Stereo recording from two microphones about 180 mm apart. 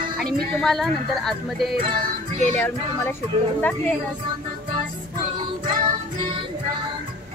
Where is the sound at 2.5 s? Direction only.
10° left (ahead or behind).